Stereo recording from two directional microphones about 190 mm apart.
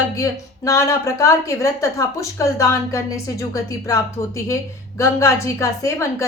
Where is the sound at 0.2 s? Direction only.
15° left (ahead or behind).